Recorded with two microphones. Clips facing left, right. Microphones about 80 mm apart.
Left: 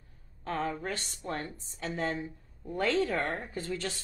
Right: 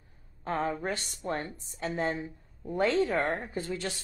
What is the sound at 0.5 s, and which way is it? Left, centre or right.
Speech, centre.